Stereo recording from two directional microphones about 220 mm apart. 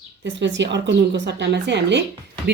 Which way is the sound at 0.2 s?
55° right (ahead or behind).